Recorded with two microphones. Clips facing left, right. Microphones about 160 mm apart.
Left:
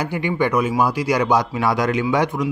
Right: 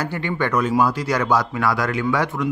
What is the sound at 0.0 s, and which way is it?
A man's voice, 15° left (ahead or behind).